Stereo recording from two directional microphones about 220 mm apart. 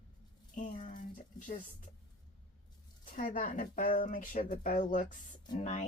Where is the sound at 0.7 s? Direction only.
35° left (ahead or behind).